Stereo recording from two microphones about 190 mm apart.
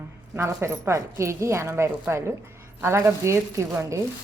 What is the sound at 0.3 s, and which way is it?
A woman's voice, 15° right (ahead or behind).